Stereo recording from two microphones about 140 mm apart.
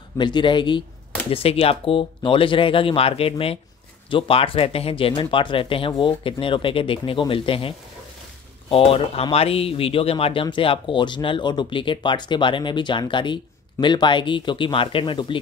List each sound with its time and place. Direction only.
0.2 s speech: 35° left (ahead or behind)